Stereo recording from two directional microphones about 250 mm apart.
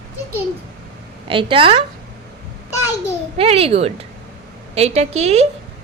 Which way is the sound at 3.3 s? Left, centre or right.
Right.